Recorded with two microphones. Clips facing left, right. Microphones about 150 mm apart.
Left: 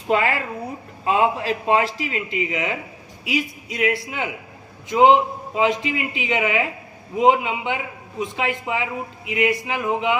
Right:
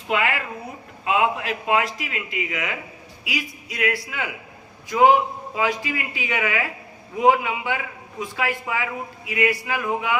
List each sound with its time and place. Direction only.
0.1 s a man's voice: 35° left (ahead or behind)